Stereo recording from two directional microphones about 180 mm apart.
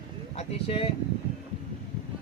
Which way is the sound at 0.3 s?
30° left (ahead or behind).